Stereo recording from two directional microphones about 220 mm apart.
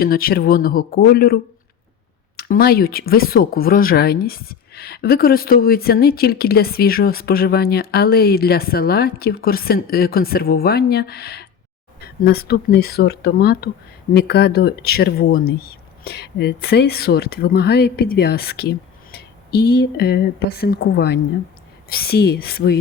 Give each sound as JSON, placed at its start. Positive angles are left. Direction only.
{"t": 0.0, "sound": "speech", "side_deg": 40}